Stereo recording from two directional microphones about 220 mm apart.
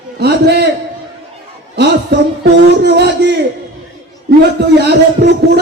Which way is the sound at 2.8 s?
50° right (ahead or behind).